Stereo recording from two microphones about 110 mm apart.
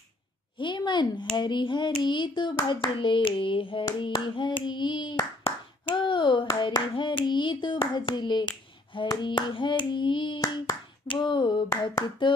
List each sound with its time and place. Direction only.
0.6 s hands: 45° left (ahead or behind)